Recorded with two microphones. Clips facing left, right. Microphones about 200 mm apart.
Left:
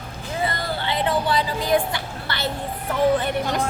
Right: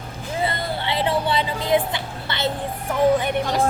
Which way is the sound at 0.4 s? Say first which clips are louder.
Even; 25° right (ahead or behind).